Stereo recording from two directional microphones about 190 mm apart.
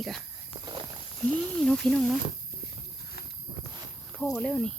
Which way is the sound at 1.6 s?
Centre (ahead or behind).